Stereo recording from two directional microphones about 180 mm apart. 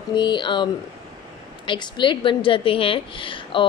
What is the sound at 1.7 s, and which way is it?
A woman's voice, 25° left (ahead or behind).